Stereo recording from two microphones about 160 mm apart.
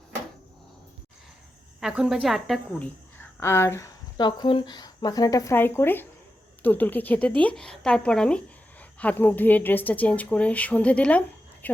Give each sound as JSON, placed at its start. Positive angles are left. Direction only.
{"t": 1.8, "sound": "a woman's voice", "side_deg": -5}